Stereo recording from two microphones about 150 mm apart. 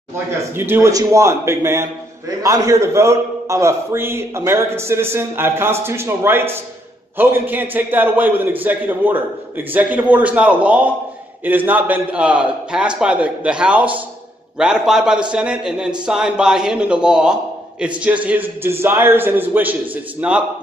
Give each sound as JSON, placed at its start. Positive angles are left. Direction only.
{"t": 0.1, "sound": "a man's voice", "side_deg": -15}